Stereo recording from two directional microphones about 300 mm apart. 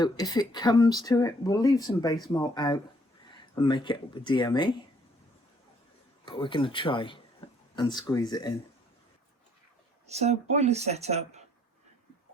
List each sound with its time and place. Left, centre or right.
0.0 s speech: centre
6.2 s speech: centre
10.1 s speech: right